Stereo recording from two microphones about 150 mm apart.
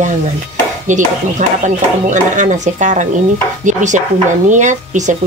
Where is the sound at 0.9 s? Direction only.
55° right (ahead or behind).